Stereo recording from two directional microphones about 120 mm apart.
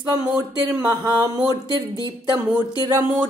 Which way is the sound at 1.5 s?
30° right (ahead or behind).